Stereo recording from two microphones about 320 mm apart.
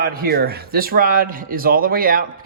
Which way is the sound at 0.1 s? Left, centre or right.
Right.